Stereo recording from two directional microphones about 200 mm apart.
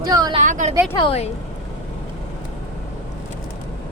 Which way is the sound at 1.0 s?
30° left (ahead or behind).